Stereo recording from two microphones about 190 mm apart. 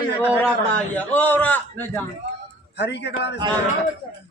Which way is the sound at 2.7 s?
65° left (ahead or behind).